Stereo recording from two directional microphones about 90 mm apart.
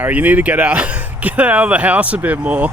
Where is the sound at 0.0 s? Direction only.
15° right (ahead or behind).